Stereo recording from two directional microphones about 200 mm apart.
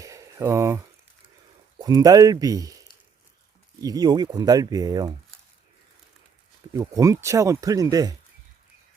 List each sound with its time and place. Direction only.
0.0 s a sound: 15° right (ahead or behind)
1.8 s speech: 20° right (ahead or behind)
3.8 s speech: 20° right (ahead or behind)
6.7 s speech: 15° right (ahead or behind)